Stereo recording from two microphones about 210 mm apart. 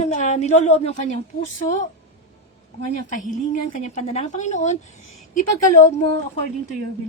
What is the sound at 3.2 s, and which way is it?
A woman's voice, 40° left (ahead or behind).